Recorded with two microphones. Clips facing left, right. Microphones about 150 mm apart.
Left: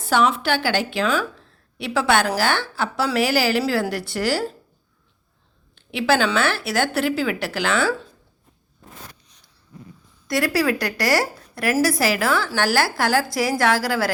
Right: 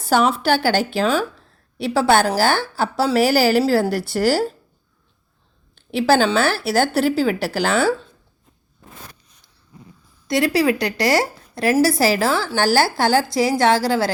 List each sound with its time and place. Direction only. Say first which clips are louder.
0.0 s a woman's voice: right 2 dB; 40° right (ahead or behind)
5.7 s a woman's voice: right 4 dB; 35° right (ahead or behind)
10.2 s a woman's voice: right 3 dB; 20° right (ahead or behind)